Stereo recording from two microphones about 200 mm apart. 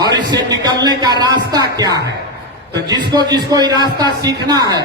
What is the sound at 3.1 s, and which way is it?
A man's voice, 20° right (ahead or behind).